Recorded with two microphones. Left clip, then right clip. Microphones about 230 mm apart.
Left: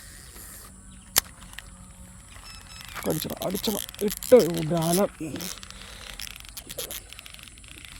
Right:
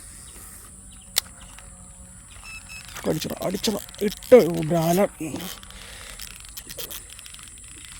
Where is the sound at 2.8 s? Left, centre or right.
Centre.